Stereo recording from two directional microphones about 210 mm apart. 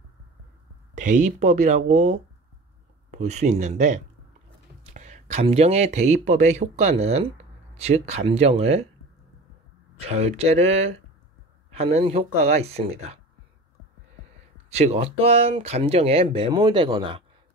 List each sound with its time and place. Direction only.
0.9 s speech: 35° right (ahead or behind)
9.9 s speech: 30° right (ahead or behind)
14.7 s speech: 30° right (ahead or behind)